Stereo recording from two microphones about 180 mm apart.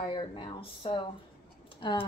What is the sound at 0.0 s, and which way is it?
A woman's voice, 25° left (ahead or behind).